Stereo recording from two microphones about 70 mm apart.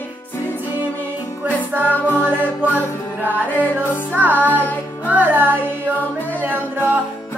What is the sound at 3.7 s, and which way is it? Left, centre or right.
Music, right.